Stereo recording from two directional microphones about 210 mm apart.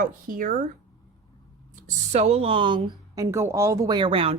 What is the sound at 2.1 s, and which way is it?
Speech, 30° right (ahead or behind).